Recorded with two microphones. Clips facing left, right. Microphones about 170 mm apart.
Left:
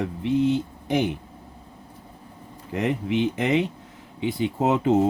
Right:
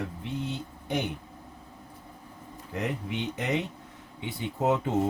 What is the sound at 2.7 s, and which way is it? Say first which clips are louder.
Speech: left 8 dB; 90° left.